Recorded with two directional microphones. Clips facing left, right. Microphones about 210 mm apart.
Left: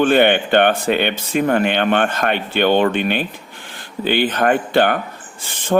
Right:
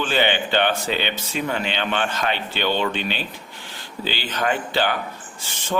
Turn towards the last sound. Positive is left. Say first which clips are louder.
# left 8 dB
turn(degrees=50)  # may be behind; listen again after turning